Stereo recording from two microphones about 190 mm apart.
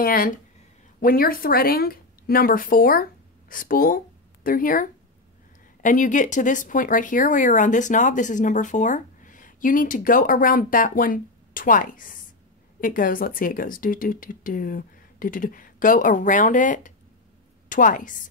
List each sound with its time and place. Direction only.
0.0 s a woman's voice: 50° left (ahead or behind)